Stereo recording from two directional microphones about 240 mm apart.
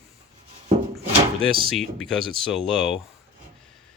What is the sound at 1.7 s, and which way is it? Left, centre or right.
Speech, centre.